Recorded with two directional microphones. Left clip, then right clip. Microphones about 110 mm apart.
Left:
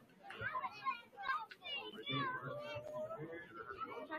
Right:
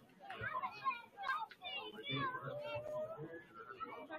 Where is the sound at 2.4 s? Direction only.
40° right (ahead or behind).